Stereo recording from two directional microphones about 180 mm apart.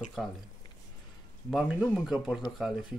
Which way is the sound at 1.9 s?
Centre (ahead or behind).